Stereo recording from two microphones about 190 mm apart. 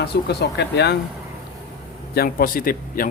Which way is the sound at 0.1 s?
60° left (ahead or behind).